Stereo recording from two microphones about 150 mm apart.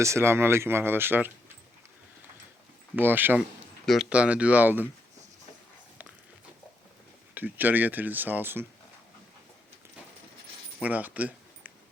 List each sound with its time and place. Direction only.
0.0 s speech: 20° right (ahead or behind)
2.9 s speech: 15° right (ahead or behind)
7.3 s speech: 10° right (ahead or behind)
10.8 s keys jangling: 10° right (ahead or behind)